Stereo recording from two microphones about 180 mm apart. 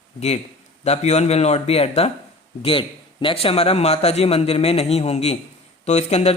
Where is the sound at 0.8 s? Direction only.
40° left (ahead or behind).